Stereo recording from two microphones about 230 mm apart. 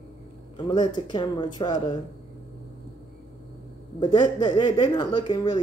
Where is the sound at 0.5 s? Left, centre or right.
Centre.